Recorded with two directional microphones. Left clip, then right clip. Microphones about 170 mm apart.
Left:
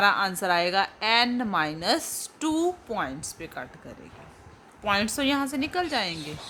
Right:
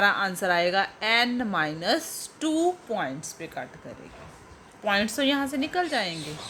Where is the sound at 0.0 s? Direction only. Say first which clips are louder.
Left 1 dB; 20° left (ahead or behind).